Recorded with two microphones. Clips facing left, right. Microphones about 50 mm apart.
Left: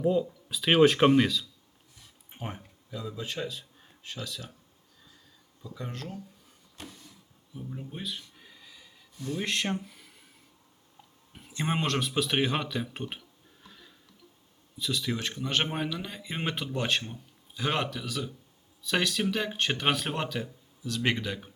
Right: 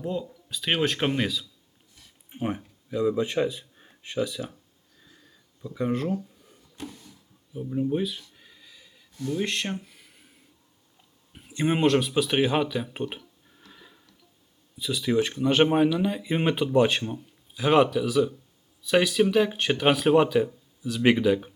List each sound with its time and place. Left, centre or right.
0.0 s speech: centre
2.9 s speech: right
5.6 s speech: centre
7.5 s a sound: centre
9.3 s speech: centre
11.3 s speech: centre
13.7 s a sound: centre
14.8 s speech: centre